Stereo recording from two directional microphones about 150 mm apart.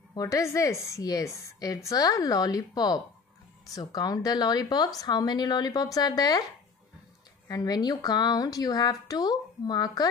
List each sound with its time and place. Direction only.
0.1 s a woman's voice: 20° left (ahead or behind)
7.4 s a woman's voice: 25° left (ahead or behind)